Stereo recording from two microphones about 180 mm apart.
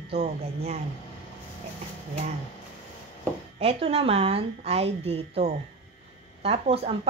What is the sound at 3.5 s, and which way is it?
A woman's voice, 35° right (ahead or behind).